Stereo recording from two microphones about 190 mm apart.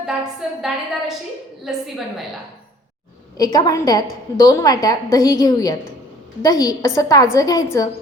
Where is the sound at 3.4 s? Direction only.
20° left (ahead or behind).